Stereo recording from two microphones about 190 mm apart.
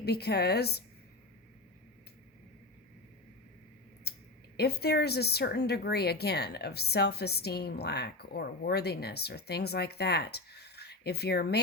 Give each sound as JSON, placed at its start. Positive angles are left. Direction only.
{"t": 0.0, "sound": "speech", "side_deg": 60}
{"t": 4.1, "sound": "a sound", "side_deg": 60}
{"t": 4.5, "sound": "speech", "side_deg": 60}